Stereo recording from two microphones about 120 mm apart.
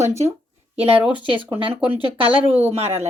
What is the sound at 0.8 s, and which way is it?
Speech, 15° right (ahead or behind).